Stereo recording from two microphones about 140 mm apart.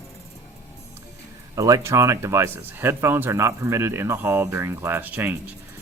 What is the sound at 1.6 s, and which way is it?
Speech, 25° right (ahead or behind).